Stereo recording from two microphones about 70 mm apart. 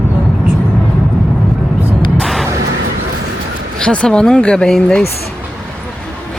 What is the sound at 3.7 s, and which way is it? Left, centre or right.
Speech, centre.